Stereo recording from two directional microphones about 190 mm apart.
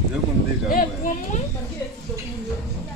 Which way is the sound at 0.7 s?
45° left (ahead or behind).